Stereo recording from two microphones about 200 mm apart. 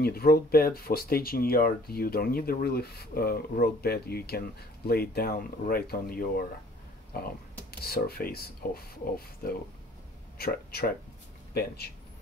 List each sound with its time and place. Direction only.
0.0 s speech: 50° left (ahead or behind)